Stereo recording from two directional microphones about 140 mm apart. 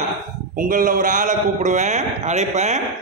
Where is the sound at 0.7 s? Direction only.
65° right (ahead or behind).